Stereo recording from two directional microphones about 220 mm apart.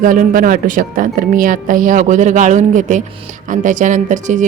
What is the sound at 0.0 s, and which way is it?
Speech, 40° right (ahead or behind).